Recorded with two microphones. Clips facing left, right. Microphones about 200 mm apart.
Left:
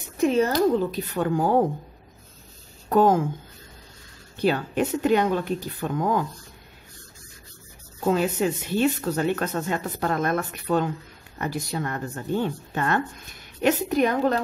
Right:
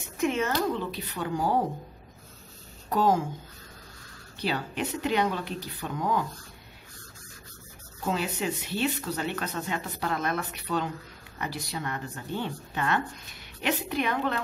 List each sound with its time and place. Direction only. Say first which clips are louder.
0.2 s speech: left 7 dB; 35° left (ahead or behind); by 1.6 s 50° left (ahead or behind)
2.9 s speech: left 6 dB; 55° left (ahead or behind)
4.4 s speech: left 8 dB; 50° left (ahead or behind)
8.0 s speech: left 8 dB; 50° left (ahead or behind)